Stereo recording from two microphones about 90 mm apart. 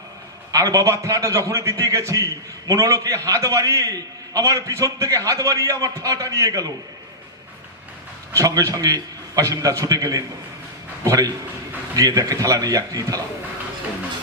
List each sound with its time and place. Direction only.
0.5 s a man's voice: 40° right (ahead or behind)
8.3 s a man's voice: 35° right (ahead or behind)